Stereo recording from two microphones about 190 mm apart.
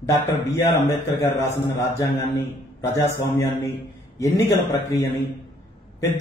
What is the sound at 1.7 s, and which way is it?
A man's voice, 15° left (ahead or behind).